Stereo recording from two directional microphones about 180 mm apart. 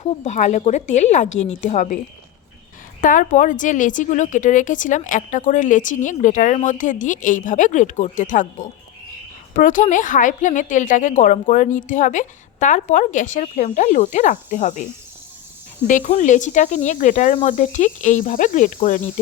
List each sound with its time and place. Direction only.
0.0 s speech: 40° left (ahead or behind)
3.0 s speech: 45° left (ahead or behind)
16.0 s speech: 40° left (ahead or behind)